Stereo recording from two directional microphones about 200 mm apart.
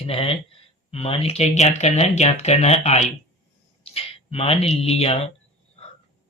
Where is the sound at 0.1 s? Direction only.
30° left (ahead or behind).